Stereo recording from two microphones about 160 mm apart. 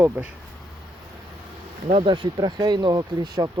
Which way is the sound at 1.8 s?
40° right (ahead or behind).